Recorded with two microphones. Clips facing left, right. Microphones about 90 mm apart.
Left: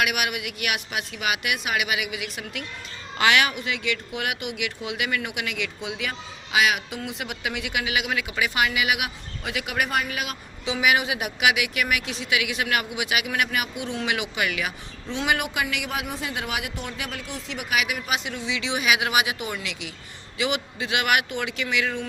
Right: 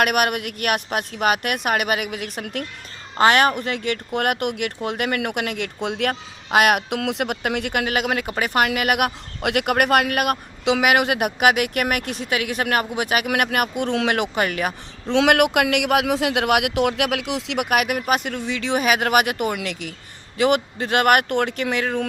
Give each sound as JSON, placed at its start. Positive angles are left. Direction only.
{"t": 0.0, "sound": "speech", "side_deg": -50}
{"t": 13.2, "sound": "speech", "side_deg": -60}
{"t": 15.0, "sound": "speech", "side_deg": -75}